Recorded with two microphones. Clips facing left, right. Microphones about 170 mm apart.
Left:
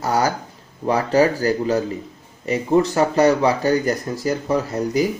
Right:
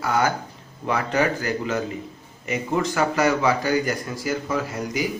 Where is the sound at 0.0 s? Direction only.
35° left (ahead or behind).